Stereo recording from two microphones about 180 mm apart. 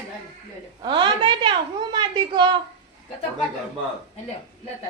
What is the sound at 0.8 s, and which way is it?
A woman's voice, 25° right (ahead or behind).